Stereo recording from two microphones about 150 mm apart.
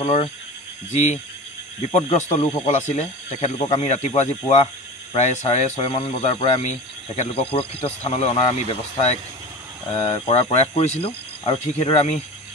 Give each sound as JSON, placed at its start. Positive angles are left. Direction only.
{"t": 0.0, "sound": "speech", "side_deg": 45}
{"t": 1.9, "sound": "speech", "side_deg": 45}